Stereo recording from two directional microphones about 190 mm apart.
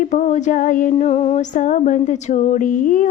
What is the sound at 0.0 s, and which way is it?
Female singing, 40° left (ahead or behind).